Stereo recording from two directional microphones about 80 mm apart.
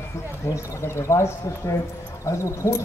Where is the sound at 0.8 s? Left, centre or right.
Left.